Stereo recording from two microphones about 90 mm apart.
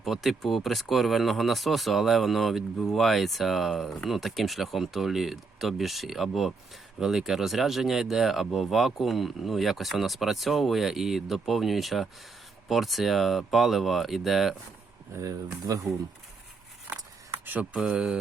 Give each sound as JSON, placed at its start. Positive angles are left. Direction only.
{"t": 0.0, "sound": "speech", "side_deg": 0}
{"t": 15.2, "sound": "speech", "side_deg": -40}
{"t": 17.4, "sound": "a sound", "side_deg": -20}
{"t": 17.7, "sound": "speech", "side_deg": -10}